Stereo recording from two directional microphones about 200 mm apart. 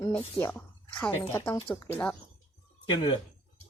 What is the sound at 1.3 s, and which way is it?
Speech, 15° left (ahead or behind).